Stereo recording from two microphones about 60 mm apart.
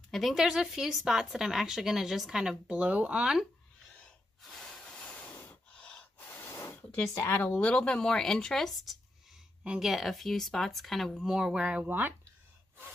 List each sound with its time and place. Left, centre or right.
0.1 s speech: centre
4.4 s snort: centre
4.8 s vehicle: centre; by 5.6 s left
5.8 s gasp: centre
6.1 s gasp: left
7.4 s speech: left; by 11.2 s centre
11.2 s speech: centre
11.8 s speech: right